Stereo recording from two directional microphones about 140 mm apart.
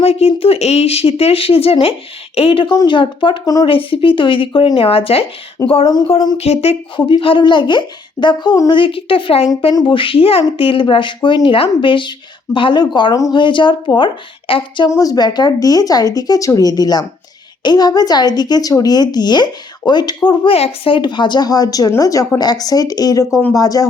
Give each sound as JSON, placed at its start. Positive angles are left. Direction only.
{"t": 0.0, "sound": "speech", "side_deg": 45}
{"t": 3.7, "sound": "speech", "side_deg": 40}
{"t": 5.6, "sound": "a woman's voice", "side_deg": 25}
{"t": 6.3, "sound": "speech", "side_deg": 45}
{"t": 8.8, "sound": "speech", "side_deg": 40}
{"t": 13.1, "sound": "a woman's voice", "side_deg": 25}
{"t": 13.4, "sound": "speech", "side_deg": 35}
{"t": 14.8, "sound": "a woman's voice", "side_deg": 25}